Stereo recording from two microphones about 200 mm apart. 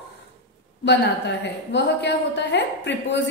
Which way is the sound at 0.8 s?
60° left (ahead or behind).